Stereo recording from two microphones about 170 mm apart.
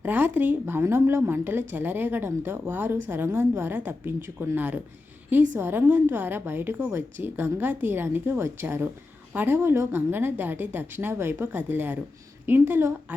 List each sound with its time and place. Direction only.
0.0 s a woman's voice: 10° right (ahead or behind)